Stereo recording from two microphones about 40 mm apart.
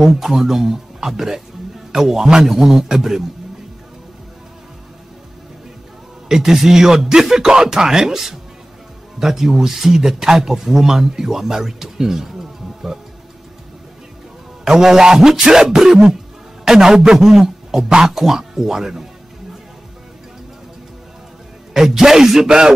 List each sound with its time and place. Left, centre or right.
0.0 s speech: centre
6.2 s speech: centre
14.6 s speech: centre
21.7 s speech: centre